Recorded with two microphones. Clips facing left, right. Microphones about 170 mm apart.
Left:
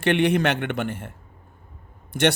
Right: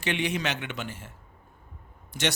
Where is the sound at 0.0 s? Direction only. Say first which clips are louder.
Left 9 dB; 60° left (ahead or behind).